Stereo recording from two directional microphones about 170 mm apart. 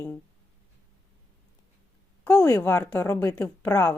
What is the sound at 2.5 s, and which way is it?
Speech, 10° left (ahead or behind).